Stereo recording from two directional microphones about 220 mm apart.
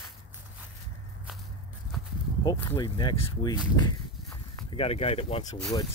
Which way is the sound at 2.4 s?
10° left (ahead or behind).